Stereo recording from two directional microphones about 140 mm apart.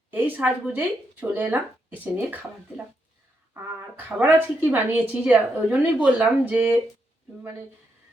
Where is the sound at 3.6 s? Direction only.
15° right (ahead or behind).